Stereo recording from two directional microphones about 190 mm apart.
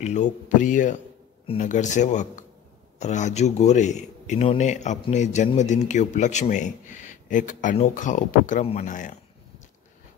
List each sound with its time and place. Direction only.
0.0 s a man's voice: 40° left (ahead or behind)